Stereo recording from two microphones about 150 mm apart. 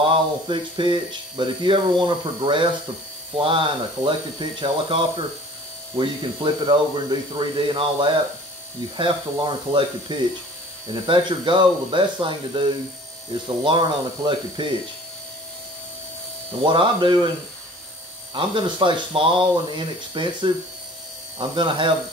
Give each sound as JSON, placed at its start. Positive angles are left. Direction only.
{"t": 0.0, "sound": "speech", "side_deg": -35}
{"t": 16.6, "sound": "speech", "side_deg": -30}
{"t": 18.3, "sound": "speech", "side_deg": -35}